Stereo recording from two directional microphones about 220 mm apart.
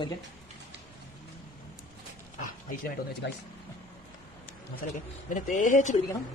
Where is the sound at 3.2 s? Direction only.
55° left (ahead or behind).